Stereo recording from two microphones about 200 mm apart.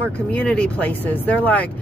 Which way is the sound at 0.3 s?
5° left (ahead or behind).